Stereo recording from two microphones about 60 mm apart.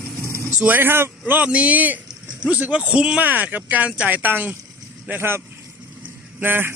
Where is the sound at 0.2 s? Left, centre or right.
Left.